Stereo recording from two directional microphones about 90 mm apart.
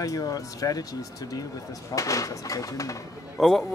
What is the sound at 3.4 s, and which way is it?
Speech, 5° left (ahead or behind).